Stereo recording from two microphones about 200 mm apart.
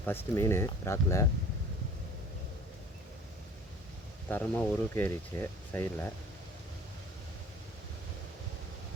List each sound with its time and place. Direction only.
0.0 s speech: 10° left (ahead or behind)
4.3 s speech: 10° left (ahead or behind)